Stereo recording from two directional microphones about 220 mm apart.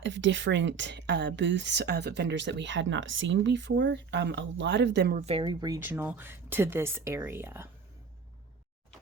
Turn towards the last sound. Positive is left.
turn(degrees=-10)  # may be behind; listen again after turning